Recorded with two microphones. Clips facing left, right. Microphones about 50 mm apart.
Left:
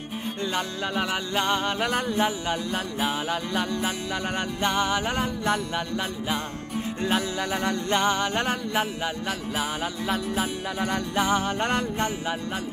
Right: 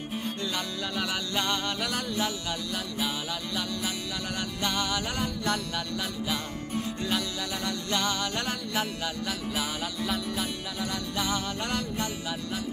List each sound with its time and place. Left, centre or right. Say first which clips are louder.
0.6 s music: left 5 dB; left
10.8 s music: left 7 dB; left